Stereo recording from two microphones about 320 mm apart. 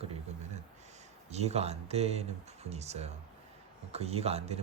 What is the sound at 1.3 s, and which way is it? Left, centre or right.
Speech, centre.